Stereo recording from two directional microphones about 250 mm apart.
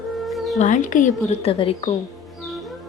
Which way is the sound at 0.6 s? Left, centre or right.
Left.